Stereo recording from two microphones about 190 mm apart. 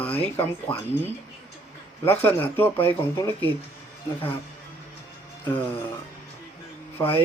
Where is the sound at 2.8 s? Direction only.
10° left (ahead or behind).